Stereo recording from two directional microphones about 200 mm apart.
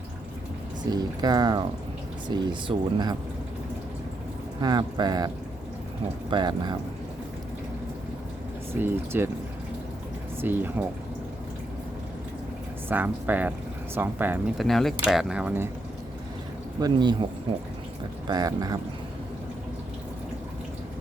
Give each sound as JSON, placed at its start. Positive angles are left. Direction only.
{"t": 0.9, "sound": "speech", "side_deg": -20}
{"t": 4.6, "sound": "speech", "side_deg": -20}
{"t": 6.3, "sound": "speech", "side_deg": -20}
{"t": 8.8, "sound": "speech", "side_deg": -10}
{"t": 10.4, "sound": "speech", "side_deg": -10}
{"t": 12.9, "sound": "speech", "side_deg": -10}
{"t": 16.8, "sound": "speech", "side_deg": -20}
{"t": 18.3, "sound": "speech", "side_deg": -20}